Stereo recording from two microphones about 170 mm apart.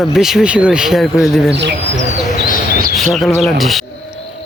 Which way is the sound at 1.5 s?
90° right.